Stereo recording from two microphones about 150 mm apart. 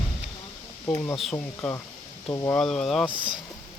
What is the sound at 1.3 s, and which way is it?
Speech, 15° left (ahead or behind).